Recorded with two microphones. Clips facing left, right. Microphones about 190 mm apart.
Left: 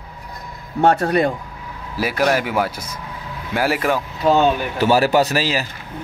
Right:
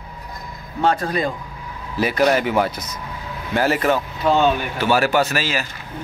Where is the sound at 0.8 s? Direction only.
65° left (ahead or behind).